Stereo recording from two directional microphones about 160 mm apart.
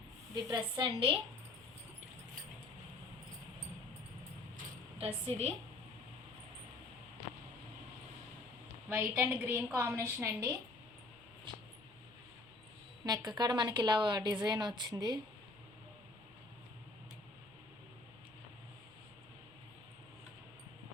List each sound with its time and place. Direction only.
0.4 s a woman's voice: 30° right (ahead or behind)
4.9 s a woman's voice: 40° right (ahead or behind)
8.9 s a woman's voice: 15° right (ahead or behind)
13.1 s a woman's voice: 25° right (ahead or behind)